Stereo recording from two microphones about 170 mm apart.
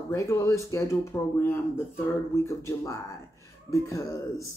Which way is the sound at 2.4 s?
15° left (ahead or behind).